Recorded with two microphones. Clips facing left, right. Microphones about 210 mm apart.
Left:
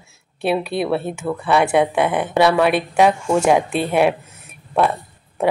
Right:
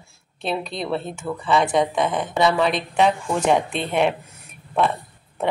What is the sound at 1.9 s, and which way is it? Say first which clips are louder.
Speech: left 4 dB; 60° left (ahead or behind).